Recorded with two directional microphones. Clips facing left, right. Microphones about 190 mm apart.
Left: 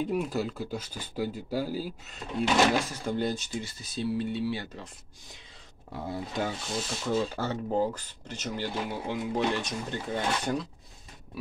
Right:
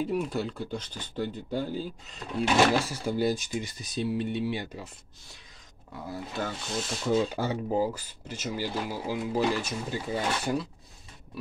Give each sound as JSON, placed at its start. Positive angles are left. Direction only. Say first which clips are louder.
{"t": 0.0, "sound": "speech", "louder": "even", "side_deg": 0}
{"t": 2.4, "sound": "speech", "louder": "right 1 dB", "side_deg": -10}
{"t": 6.3, "sound": "speech", "louder": "even", "side_deg": 15}
{"t": 7.1, "sound": "speech", "louder": "right 3 dB", "side_deg": -10}